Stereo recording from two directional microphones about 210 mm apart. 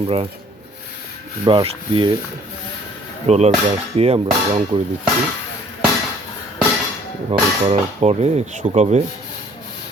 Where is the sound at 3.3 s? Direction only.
30° right (ahead or behind).